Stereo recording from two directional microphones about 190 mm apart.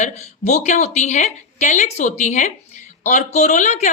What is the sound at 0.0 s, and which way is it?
Speech, 35° left (ahead or behind).